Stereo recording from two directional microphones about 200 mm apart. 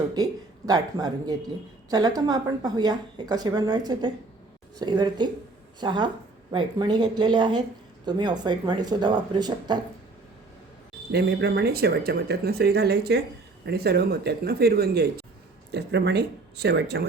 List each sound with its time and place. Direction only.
0.1 s speech: 20° right (ahead or behind)
11.1 s speech: 55° right (ahead or behind)